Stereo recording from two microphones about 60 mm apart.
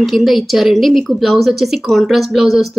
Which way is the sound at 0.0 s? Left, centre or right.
Centre.